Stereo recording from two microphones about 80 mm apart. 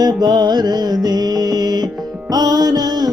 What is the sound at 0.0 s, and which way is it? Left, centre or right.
Music, right.